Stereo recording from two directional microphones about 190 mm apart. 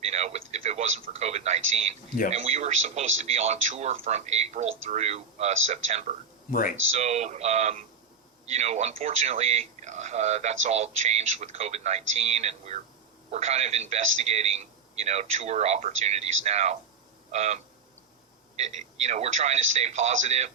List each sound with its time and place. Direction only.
0.0 s speech: 35° right (ahead or behind)
6.5 s speech: 45° left (ahead or behind)
6.9 s speech: 35° right (ahead or behind)